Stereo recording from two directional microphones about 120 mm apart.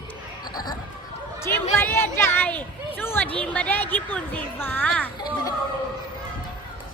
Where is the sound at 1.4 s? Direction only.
20° left (ahead or behind).